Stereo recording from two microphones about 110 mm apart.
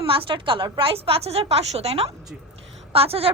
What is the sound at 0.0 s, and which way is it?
A woman's voice, 55° right (ahead or behind).